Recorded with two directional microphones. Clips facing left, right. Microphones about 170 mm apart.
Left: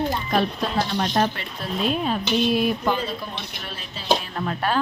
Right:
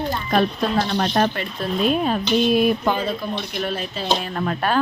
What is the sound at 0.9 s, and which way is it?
A woman's voice, 60° right (ahead or behind).